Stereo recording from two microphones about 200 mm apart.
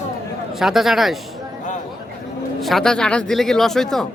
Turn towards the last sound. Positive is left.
turn(degrees=0)  # may be behind; listen again after turning